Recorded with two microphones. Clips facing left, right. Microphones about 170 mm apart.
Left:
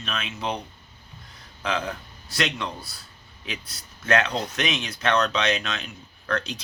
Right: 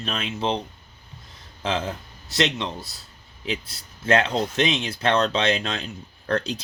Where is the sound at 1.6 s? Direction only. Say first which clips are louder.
Right 2 dB; 25° right (ahead or behind).